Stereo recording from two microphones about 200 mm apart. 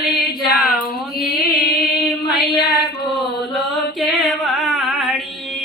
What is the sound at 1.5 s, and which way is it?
Music, 50° left (ahead or behind).